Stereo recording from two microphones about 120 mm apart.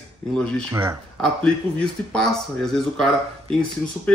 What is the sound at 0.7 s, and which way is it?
Speech, 20° right (ahead or behind).